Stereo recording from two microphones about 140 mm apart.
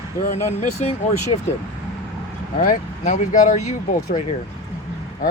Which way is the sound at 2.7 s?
60° left (ahead or behind).